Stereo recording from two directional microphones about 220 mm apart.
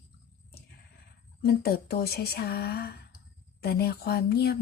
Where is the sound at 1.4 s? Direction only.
45° left (ahead or behind).